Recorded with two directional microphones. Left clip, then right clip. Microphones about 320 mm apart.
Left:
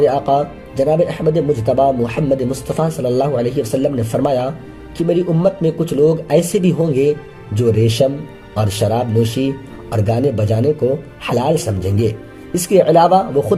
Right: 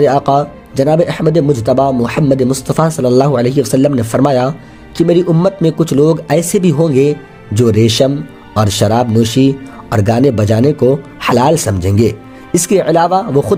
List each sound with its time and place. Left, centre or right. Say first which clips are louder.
0.0 s speech: right 3 dB; right